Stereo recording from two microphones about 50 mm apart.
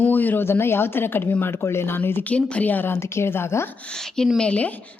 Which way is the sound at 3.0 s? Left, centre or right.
Left.